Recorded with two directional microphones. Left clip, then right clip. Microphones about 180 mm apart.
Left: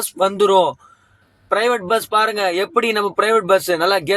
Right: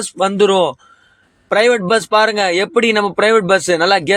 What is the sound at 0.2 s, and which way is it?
Speech, 15° right (ahead or behind).